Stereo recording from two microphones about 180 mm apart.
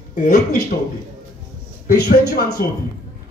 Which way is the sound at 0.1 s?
45° left (ahead or behind).